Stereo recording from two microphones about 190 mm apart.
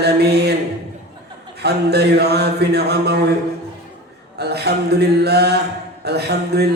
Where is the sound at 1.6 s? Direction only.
60° right (ahead or behind).